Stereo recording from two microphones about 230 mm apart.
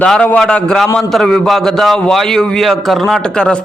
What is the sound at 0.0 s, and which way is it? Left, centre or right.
A man's voice, centre.